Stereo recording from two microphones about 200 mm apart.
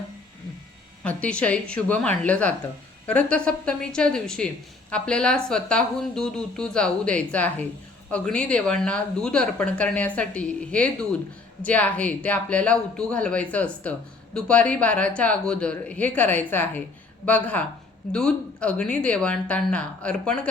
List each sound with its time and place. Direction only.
1.0 s a woman's voice: 5° left (ahead or behind)